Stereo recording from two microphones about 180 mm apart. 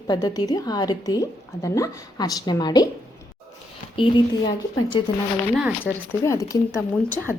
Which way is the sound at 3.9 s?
30° left (ahead or behind).